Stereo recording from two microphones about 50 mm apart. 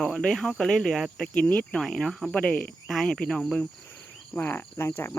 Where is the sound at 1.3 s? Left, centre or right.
Left.